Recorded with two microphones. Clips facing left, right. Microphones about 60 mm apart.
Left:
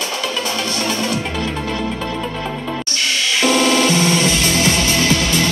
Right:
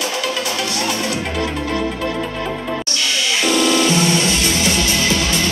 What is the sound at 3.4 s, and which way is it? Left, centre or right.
Music, left.